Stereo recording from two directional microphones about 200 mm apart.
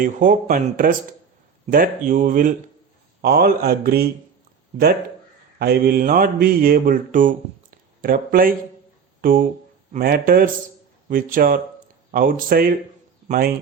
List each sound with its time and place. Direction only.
0.0 s mantra: 40° right (ahead or behind)
5.5 s mantra: 50° right (ahead or behind)
13.2 s speech: 45° right (ahead or behind)